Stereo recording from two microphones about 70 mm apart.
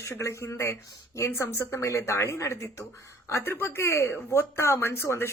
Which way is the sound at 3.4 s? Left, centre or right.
Left.